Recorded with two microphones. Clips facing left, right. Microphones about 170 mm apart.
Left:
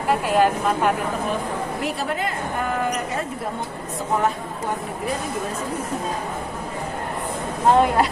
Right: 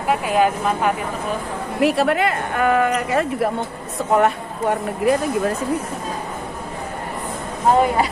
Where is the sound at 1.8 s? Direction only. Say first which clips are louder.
Right 13 dB; 75° right (ahead or behind).